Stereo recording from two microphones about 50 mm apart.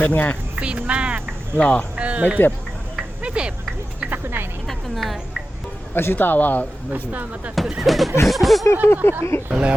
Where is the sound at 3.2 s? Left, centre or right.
Right.